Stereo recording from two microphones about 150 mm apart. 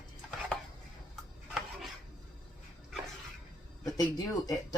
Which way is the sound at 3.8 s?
25° left (ahead or behind).